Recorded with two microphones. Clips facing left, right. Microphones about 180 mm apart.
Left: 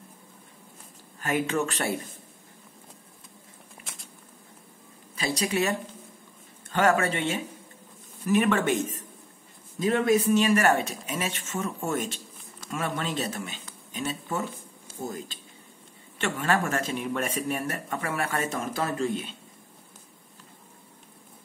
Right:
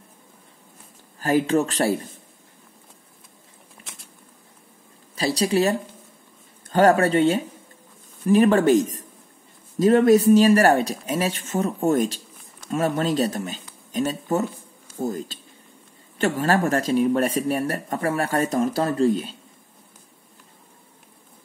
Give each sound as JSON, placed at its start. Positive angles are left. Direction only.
{"t": 1.2, "sound": "speech", "side_deg": -35}
{"t": 3.8, "sound": "a sound", "side_deg": 0}
{"t": 5.1, "sound": "speech", "side_deg": -35}